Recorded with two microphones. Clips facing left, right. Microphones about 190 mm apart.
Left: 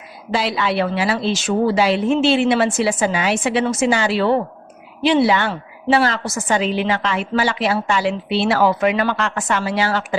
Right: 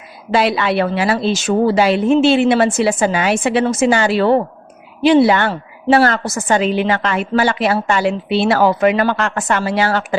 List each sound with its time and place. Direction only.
0.3 s a woman's voice: 60° right (ahead or behind)